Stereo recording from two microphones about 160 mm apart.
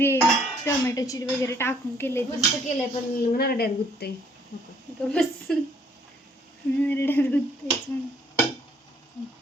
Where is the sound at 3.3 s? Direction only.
70° left (ahead or behind).